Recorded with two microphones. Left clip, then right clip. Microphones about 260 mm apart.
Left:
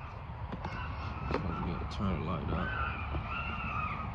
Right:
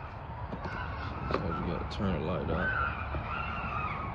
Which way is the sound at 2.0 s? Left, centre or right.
Centre.